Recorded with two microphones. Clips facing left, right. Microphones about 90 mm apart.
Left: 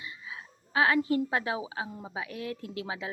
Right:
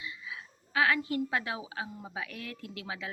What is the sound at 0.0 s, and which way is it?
A woman's voice, 30° left (ahead or behind).